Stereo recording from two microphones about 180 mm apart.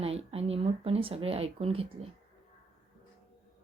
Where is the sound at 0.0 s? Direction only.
35° right (ahead or behind).